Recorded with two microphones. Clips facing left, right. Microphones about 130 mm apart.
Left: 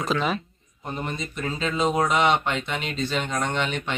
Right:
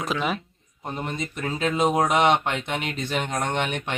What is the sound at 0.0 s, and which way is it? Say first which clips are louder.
Speech: left 1 dB; 15° right (ahead or behind).